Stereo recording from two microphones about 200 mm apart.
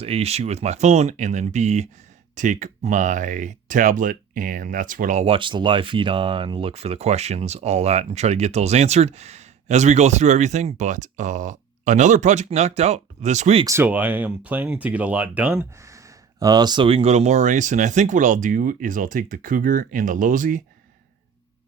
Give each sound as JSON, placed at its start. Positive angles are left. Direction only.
{"t": 0.0, "sound": "speech", "side_deg": -30}
{"t": 13.7, "sound": "speech", "side_deg": -10}